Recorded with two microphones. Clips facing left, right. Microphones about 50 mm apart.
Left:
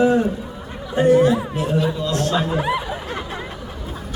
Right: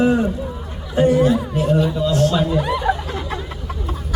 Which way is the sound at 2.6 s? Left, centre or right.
Centre.